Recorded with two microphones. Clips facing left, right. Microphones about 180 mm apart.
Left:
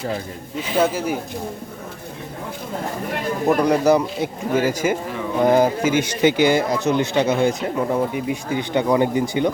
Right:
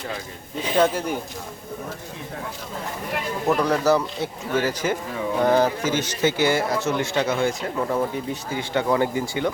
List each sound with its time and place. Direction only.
0.8 s a man's voice: 5° left (ahead or behind)
3.4 s a man's voice: 15° left (ahead or behind)